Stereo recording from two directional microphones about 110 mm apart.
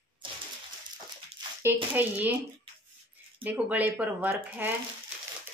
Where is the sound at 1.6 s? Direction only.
20° right (ahead or behind).